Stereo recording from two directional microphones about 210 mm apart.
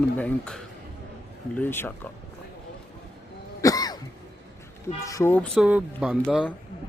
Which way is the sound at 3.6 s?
15° left (ahead or behind).